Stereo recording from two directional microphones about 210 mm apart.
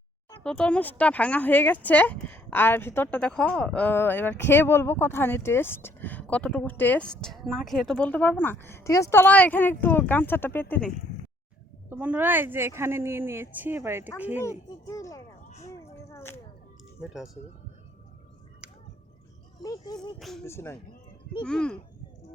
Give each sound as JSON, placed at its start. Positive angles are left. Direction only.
{"t": 0.3, "sound": "speech", "side_deg": 5}
{"t": 11.9, "sound": "speech", "side_deg": -10}
{"t": 14.8, "sound": "a sound", "side_deg": 15}
{"t": 19.6, "sound": "speech", "side_deg": 20}
{"t": 20.1, "sound": "speech", "side_deg": 0}
{"t": 20.4, "sound": "speech", "side_deg": 10}